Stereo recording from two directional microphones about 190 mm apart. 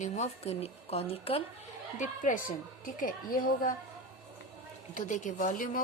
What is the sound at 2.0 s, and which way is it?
A woman's voice, 40° left (ahead or behind).